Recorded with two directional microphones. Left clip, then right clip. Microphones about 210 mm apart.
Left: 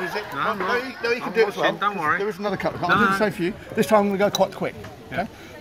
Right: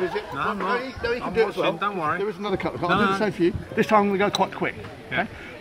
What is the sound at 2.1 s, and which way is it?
A man's voice, 35° left (ahead or behind).